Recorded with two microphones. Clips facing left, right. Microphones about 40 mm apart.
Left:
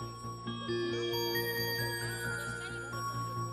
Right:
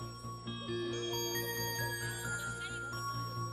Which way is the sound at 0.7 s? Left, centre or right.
Left.